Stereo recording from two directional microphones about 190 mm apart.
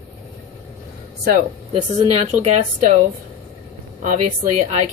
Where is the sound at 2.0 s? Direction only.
30° right (ahead or behind).